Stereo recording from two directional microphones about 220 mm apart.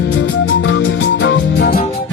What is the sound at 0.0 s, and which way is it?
Music, 55° left (ahead or behind).